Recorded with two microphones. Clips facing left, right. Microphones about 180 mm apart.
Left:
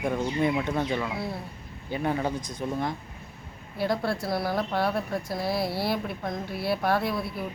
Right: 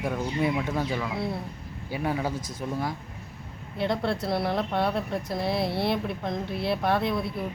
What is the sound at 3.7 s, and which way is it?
Speech, 25° right (ahead or behind).